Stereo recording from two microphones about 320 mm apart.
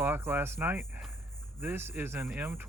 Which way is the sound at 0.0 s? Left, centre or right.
Centre.